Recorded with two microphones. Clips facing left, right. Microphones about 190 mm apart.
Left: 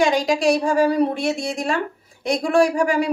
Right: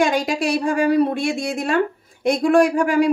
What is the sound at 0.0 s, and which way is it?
Speech, 55° right (ahead or behind).